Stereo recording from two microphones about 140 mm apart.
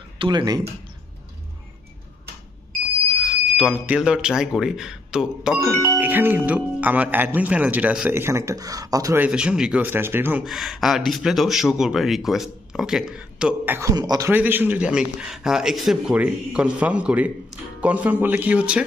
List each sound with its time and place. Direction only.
0.2 s speech: 35° right (ahead or behind)
3.5 s a man's voice: 10° right (ahead or behind); by 9.2 s 25° right (ahead or behind)
9.2 s a man's voice: 5° right (ahead or behind)
10.4 s speech: centre (ahead or behind)
13.7 s speech: 25° right (ahead or behind)
14.3 s a man's voice: 15° right (ahead or behind)